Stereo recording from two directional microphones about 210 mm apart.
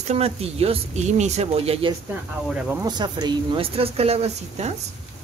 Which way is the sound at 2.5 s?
5° right (ahead or behind).